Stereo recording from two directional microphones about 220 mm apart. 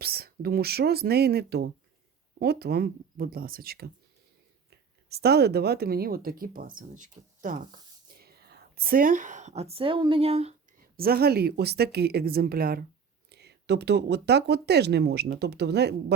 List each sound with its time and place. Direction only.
0.0 s speech: 45° right (ahead or behind)
5.0 s speech: 45° right (ahead or behind); by 10.5 s 25° right (ahead or behind)
10.9 s speech: 45° right (ahead or behind)